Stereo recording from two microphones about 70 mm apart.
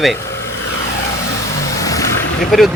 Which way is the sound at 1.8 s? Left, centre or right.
Left.